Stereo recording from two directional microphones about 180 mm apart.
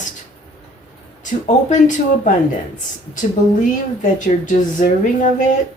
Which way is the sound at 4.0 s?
45° left (ahead or behind).